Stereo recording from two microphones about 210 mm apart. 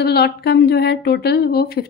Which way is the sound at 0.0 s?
50° left (ahead or behind).